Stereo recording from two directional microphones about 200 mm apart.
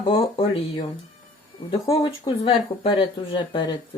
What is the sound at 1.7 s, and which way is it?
Speech, 25° left (ahead or behind).